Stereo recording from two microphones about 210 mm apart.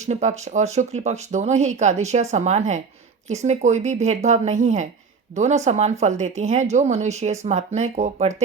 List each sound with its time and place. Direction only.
0.0 s speech: 35° right (ahead or behind)